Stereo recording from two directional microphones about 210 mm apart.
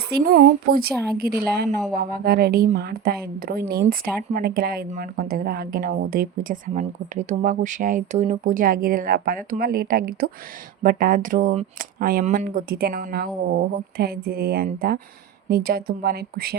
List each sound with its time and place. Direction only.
0.1 s speech: 40° right (ahead or behind)